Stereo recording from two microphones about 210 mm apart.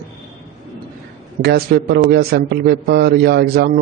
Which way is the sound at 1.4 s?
50° right (ahead or behind).